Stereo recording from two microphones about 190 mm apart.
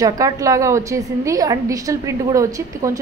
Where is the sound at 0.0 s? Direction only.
15° right (ahead or behind).